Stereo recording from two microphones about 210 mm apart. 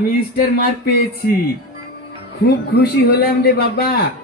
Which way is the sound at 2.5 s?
50° left (ahead or behind).